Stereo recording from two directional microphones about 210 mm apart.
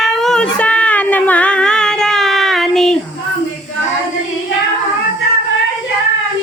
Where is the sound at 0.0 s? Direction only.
Centre (ahead or behind).